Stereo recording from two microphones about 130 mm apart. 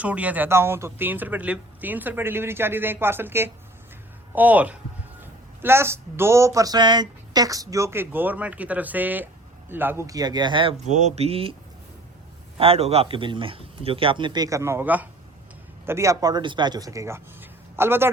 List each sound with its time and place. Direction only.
0.0 s speech: 10° right (ahead or behind); by 10.8 s 40° right (ahead or behind)
10.8 s speech: 65° right (ahead or behind); by 11.5 s 45° right (ahead or behind)
12.5 s a man's voice: 50° right (ahead or behind); by 18.1 s 15° right (ahead or behind)